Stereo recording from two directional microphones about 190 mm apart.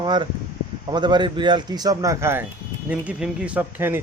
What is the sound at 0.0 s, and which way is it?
A man's voice, 25° right (ahead or behind).